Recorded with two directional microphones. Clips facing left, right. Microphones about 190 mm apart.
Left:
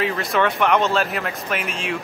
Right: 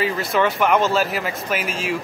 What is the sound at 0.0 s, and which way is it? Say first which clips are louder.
Speech: right 1 dB; centre (ahead or behind).